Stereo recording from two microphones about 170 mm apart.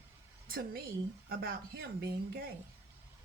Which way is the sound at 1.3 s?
65° right (ahead or behind).